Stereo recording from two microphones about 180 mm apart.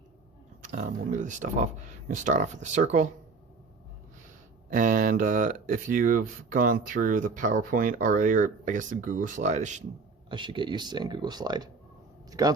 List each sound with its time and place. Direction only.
0.6 s speech: 40° right (ahead or behind)
4.7 s speech: 45° right (ahead or behind)
10.2 s speech: 25° right (ahead or behind)